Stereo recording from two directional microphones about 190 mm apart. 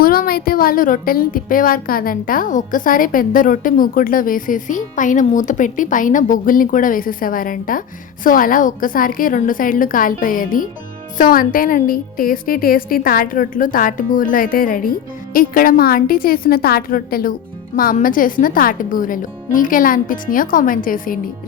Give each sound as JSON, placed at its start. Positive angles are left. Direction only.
{"t": 0.0, "sound": "speech", "side_deg": 50}